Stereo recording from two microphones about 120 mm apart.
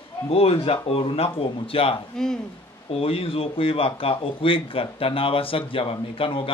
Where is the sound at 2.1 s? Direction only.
5° left (ahead or behind).